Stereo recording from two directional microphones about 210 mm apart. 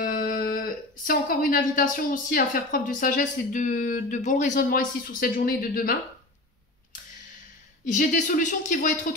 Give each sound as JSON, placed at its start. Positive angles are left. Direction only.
{"t": 0.0, "sound": "speech", "side_deg": 40}
{"t": 7.8, "sound": "speech", "side_deg": 35}